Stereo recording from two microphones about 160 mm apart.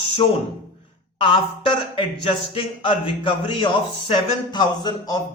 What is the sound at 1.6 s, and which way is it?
Speech, 30° left (ahead or behind).